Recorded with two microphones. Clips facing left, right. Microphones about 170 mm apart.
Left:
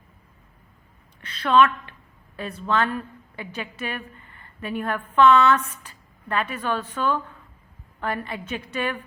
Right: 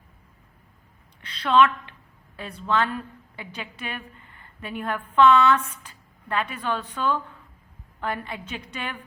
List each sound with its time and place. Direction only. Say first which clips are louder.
1.5 s a woman's voice: left 1 dB; 15° right (ahead or behind)